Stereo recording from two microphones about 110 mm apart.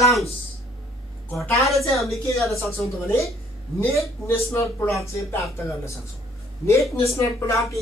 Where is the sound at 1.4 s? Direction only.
25° left (ahead or behind).